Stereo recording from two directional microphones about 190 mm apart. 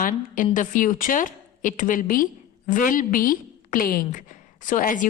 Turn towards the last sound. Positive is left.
turn(degrees=45)  # may be behind; listen again after turning